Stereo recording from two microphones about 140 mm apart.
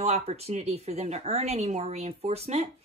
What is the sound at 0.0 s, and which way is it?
Speech, 50° right (ahead or behind).